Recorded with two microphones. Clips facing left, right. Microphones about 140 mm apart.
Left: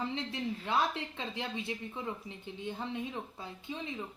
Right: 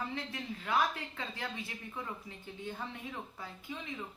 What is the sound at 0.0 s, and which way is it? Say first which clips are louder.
A woman's voice: left 4 dB; 25° left (ahead or behind).